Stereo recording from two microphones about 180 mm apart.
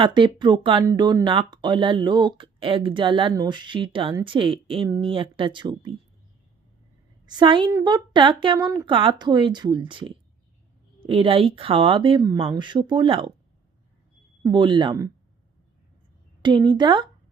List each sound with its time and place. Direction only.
0.0 s speech: 25° right (ahead or behind)
7.3 s speech: 25° right (ahead or behind)
14.4 s speech: 25° right (ahead or behind)
16.4 s speech: 25° right (ahead or behind)